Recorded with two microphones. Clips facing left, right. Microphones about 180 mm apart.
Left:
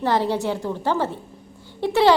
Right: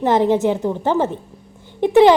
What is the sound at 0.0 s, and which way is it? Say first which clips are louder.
A woman's voice: right 6 dB; 20° right (ahead or behind).